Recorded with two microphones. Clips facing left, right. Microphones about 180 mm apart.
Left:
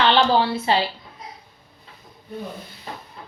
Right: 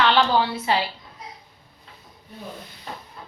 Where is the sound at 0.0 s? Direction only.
30° left (ahead or behind).